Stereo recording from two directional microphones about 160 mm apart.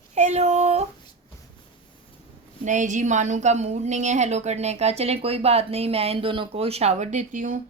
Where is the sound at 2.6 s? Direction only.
50° right (ahead or behind).